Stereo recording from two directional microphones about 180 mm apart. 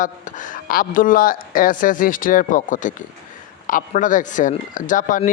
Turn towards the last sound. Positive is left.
turn(degrees=45)  # may be behind; listen again after turning